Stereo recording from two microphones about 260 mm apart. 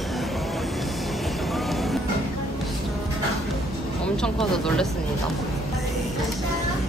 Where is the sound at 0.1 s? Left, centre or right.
Centre.